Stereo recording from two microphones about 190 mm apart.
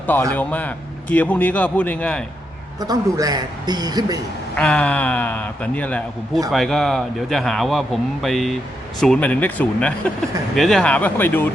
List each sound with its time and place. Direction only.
0.3 s speech: 10° left (ahead or behind)
2.8 s speech: 20° right (ahead or behind)
4.5 s speech: 5° left (ahead or behind)